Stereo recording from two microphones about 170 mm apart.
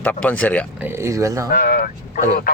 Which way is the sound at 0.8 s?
15° right (ahead or behind).